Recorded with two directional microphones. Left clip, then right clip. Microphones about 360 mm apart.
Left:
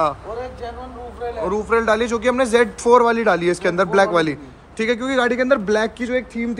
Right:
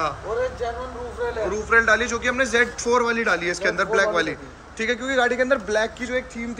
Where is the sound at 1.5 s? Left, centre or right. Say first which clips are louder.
Even; centre.